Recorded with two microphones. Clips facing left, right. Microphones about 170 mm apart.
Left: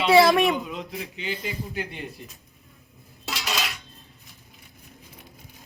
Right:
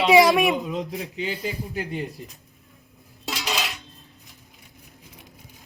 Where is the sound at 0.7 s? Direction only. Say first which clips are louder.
Right 5 dB; 35° right (ahead or behind).